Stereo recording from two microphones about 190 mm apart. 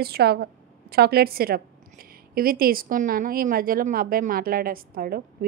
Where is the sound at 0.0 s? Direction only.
55° right (ahead or behind).